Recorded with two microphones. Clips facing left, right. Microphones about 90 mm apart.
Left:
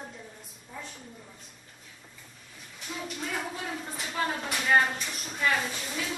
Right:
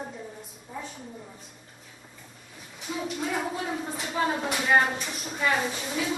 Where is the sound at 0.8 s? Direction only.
5° right (ahead or behind).